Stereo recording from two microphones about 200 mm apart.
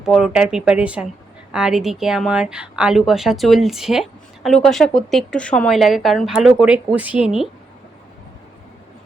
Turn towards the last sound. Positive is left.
turn(degrees=-5)  # may be behind; listen again after turning